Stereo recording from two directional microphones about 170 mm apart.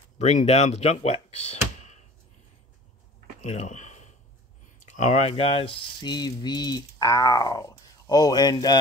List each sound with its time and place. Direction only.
0.2 s speech: 40° left (ahead or behind)
3.4 s speech: 40° left (ahead or behind); by 8.7 s 25° left (ahead or behind)